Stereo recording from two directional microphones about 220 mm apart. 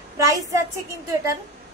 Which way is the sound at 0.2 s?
15° right (ahead or behind).